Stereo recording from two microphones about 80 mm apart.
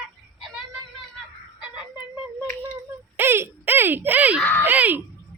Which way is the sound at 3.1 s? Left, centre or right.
Right.